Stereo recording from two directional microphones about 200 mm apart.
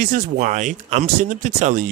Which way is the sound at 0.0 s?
40° right (ahead or behind).